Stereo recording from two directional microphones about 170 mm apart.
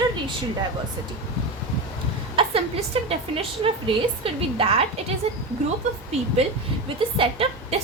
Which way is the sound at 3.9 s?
30° right (ahead or behind).